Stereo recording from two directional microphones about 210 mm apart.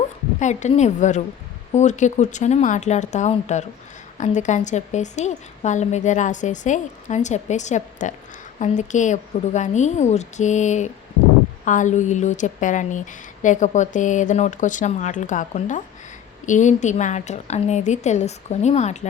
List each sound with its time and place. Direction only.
0.3 s a woman's voice: 35° left (ahead or behind)